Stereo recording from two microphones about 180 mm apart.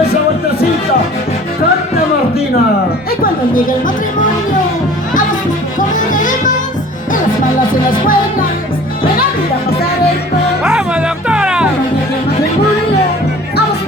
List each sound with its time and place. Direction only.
3.5 s music: 50° left (ahead or behind)
6.0 s music: 45° left (ahead or behind)
7.9 s music: 50° left (ahead or behind)
10.6 s music: 5° right (ahead or behind)